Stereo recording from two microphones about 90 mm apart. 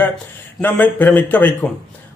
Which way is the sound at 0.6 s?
20° left (ahead or behind).